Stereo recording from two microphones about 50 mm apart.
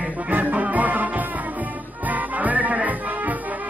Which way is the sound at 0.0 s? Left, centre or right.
Right.